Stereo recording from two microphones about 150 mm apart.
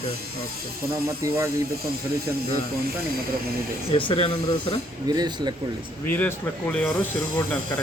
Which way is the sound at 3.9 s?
35° left (ahead or behind).